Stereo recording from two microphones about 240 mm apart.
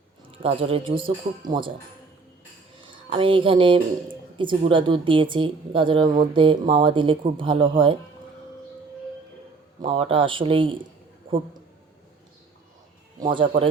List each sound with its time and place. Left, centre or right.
0.3 s speech: right
2.8 s speech: right
9.8 s speech: right
13.1 s speech: centre